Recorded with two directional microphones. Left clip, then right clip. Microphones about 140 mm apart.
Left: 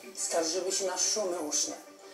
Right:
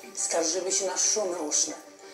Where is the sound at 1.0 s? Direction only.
5° left (ahead or behind).